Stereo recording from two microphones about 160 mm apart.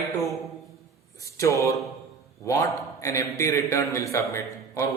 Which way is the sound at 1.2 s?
20° left (ahead or behind).